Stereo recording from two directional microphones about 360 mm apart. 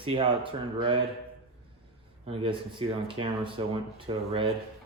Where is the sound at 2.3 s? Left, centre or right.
Centre.